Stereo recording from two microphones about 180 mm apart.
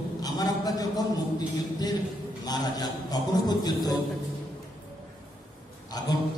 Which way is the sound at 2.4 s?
20° left (ahead or behind).